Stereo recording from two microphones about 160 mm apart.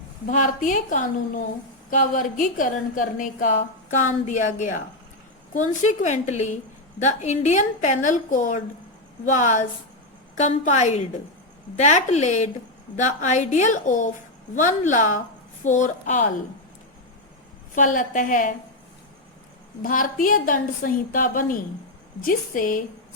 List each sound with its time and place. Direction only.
0.3 s a woman's voice: 55° left (ahead or behind)
17.7 s a woman's voice: 55° left (ahead or behind)
19.8 s a woman's voice: 60° left (ahead or behind)